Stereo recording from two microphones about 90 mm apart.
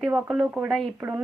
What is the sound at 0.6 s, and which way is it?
Speech, centre (ahead or behind).